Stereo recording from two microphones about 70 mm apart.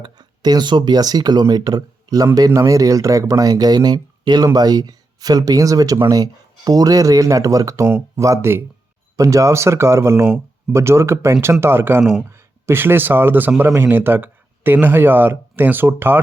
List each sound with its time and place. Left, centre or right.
0.2 s speech: right
4.5 s speech: right
7.9 s a man's voice: right
8.2 s a man's voice: right
9.1 s a man's voice: right